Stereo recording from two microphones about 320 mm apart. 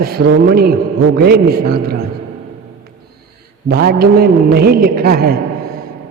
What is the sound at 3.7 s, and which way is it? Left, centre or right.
A man's voice, right.